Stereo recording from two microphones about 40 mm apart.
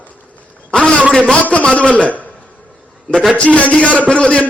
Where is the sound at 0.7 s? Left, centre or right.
Left.